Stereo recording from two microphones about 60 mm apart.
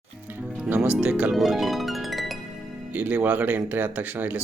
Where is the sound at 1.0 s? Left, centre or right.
Centre.